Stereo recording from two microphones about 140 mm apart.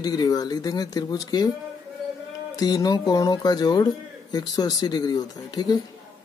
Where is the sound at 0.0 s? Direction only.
25° left (ahead or behind).